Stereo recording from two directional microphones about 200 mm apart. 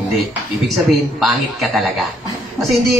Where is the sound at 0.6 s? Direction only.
Centre (ahead or behind).